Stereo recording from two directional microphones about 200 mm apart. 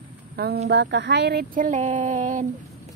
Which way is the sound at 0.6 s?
60° right (ahead or behind).